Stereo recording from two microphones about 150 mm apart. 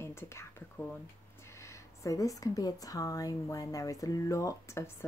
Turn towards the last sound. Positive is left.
turn(degrees=20)  # may be behind; listen again after turning